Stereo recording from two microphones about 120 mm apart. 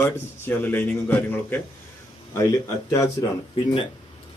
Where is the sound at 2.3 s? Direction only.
25° left (ahead or behind).